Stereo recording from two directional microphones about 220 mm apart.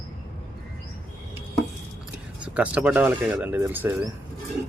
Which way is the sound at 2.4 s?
5° right (ahead or behind).